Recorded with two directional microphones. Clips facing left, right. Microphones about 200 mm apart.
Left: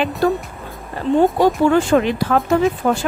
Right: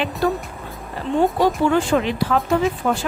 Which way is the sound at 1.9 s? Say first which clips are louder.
Left 3 dB; 50° left (ahead or behind).